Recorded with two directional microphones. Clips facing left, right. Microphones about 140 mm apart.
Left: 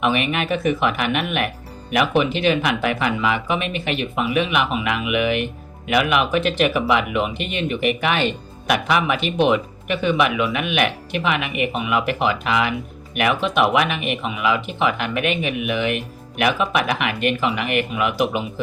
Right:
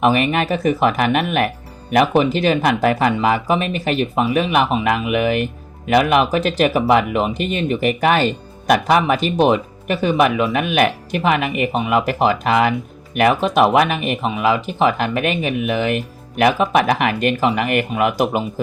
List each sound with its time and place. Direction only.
0.0 s speech: 40° right (ahead or behind)